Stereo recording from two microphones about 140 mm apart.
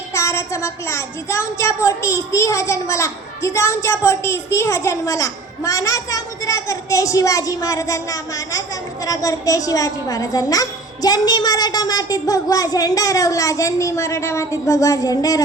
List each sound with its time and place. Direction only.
0.1 s a child's voice: 20° left (ahead or behind)